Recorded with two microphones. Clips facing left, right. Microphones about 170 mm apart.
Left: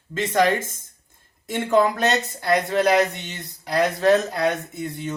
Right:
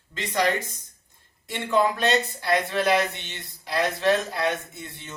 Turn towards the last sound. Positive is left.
turn(degrees=40)  # may be behind; listen again after turning